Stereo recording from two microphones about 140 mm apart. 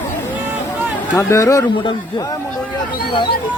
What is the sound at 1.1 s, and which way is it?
Speech, 20° left (ahead or behind).